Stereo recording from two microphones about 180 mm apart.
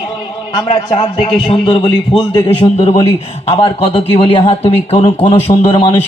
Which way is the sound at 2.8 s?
35° left (ahead or behind).